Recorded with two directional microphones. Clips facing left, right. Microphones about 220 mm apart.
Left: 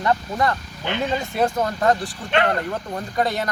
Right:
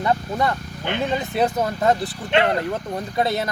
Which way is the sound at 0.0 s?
5° right (ahead or behind).